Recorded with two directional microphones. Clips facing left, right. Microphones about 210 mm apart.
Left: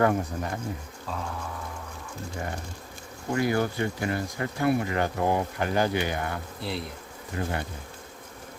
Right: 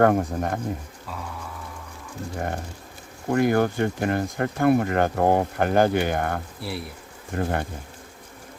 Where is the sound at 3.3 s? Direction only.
55° right (ahead or behind).